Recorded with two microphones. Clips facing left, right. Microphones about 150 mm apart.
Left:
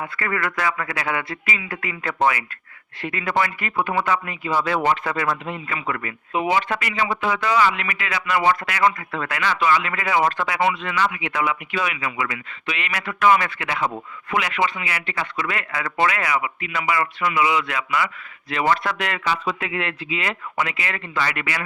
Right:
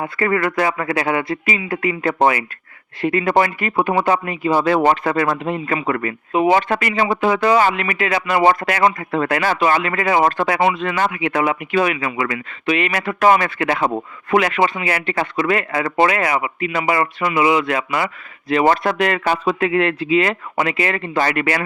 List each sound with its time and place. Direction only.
0.0 s speech: 30° right (ahead or behind); by 19.6 s 50° right (ahead or behind)
19.6 s speech: 40° right (ahead or behind)